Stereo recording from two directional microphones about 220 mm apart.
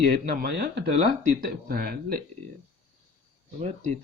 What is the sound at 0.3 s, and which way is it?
Speech, 45° right (ahead or behind).